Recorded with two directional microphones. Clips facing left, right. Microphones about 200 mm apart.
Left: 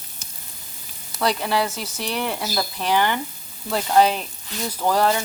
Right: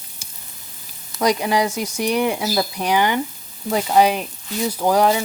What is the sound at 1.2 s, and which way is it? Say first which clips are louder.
Speech: right 4 dB; 15° right (ahead or behind).